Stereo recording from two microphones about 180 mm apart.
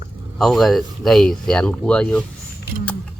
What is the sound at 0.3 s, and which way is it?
Speech, centre (ahead or behind).